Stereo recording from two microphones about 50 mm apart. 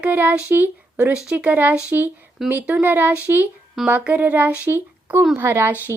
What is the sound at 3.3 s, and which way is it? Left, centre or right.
Speech, right.